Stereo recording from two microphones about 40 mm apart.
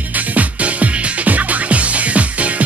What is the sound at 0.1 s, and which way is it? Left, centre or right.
Music, right.